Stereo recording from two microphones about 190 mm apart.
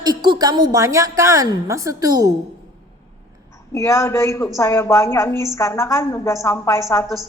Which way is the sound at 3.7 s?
15° left (ahead or behind).